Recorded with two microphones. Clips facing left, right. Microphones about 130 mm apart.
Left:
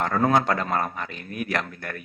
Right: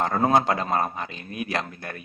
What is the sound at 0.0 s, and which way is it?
Speech, 25° right (ahead or behind).